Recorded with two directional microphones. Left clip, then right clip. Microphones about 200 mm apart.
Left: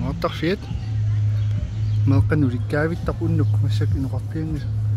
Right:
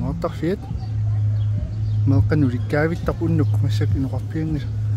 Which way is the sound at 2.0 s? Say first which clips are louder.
Right 1 dB; 10° right (ahead or behind).